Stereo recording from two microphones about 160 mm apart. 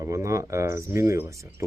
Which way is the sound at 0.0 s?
20° right (ahead or behind).